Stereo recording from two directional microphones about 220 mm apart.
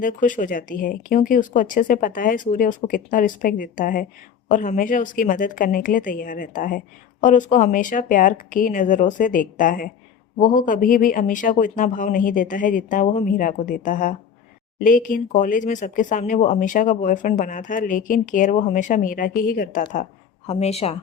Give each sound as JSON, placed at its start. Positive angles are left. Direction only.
{"t": 0.0, "sound": "a woman's voice", "side_deg": 35}